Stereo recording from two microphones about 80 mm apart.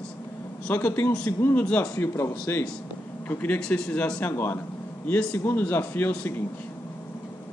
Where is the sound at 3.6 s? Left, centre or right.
Centre.